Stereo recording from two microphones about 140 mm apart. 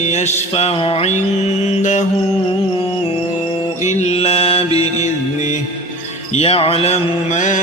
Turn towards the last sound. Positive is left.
turn(degrees=60)  # may be behind; listen again after turning